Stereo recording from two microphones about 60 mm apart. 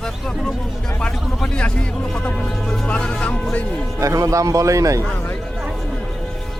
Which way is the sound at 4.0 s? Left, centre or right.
Right.